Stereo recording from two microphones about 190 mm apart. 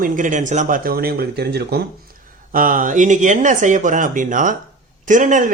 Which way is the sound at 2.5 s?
45° right (ahead or behind).